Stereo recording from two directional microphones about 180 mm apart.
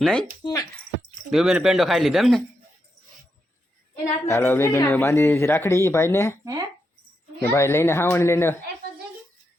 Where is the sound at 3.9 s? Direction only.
15° left (ahead or behind).